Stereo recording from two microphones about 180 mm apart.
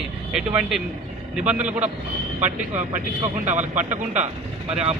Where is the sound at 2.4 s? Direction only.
40° right (ahead or behind).